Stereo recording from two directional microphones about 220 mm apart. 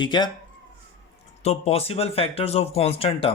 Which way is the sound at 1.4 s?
30° left (ahead or behind).